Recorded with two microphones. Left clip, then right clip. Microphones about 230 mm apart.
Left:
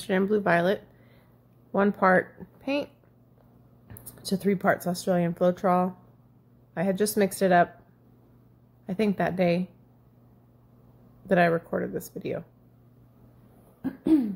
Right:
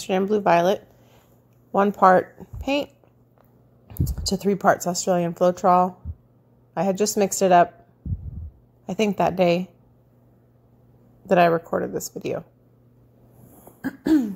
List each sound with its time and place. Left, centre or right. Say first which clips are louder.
0.0 s speech: right 4 dB; centre
8.8 s speech: right 5 dB; centre
11.2 s speech: right 5 dB; centre
13.8 s throat clearing: right 3 dB; right